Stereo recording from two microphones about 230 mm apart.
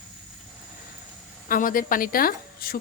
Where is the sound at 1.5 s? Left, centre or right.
Left.